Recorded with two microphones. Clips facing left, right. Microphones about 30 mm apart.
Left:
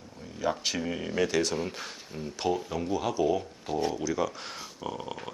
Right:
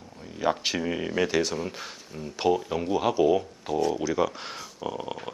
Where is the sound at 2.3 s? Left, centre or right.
Centre.